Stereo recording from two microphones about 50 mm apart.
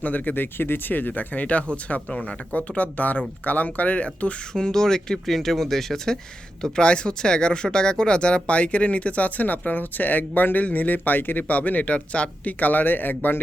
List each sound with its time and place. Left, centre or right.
0.0 s speech: left
0.6 s speech: left
4.5 s speech: centre
6.6 s speech: centre; by 13.4 s left